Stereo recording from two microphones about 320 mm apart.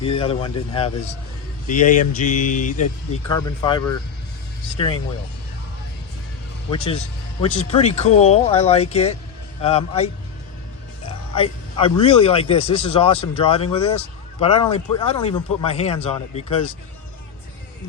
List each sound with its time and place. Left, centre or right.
0.0 s a man's voice: centre
3.1 s a man's voice: centre
6.7 s a man's voice: centre
11.3 s a man's voice: centre